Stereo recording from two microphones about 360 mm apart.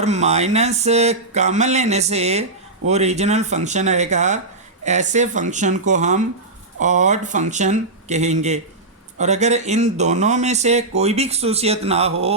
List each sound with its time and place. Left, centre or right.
0.0 s speech: centre